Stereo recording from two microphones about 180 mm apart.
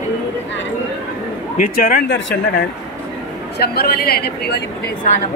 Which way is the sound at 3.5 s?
60° left (ahead or behind).